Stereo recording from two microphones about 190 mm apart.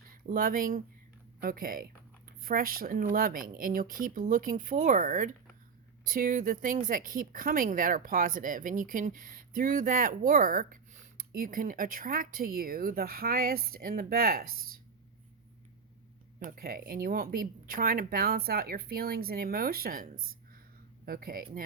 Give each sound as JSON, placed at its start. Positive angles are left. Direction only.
{"t": 0.1, "sound": "speech", "side_deg": -50}
{"t": 16.4, "sound": "speech", "side_deg": -50}